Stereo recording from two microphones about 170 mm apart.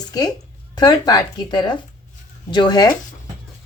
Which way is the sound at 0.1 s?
20° left (ahead or behind).